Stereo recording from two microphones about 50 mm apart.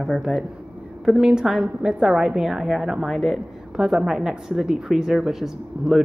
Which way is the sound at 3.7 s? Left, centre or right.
Centre.